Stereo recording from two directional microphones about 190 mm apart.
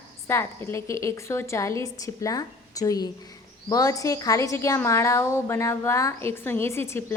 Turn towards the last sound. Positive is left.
turn(degrees=15)  # may be behind; listen again after turning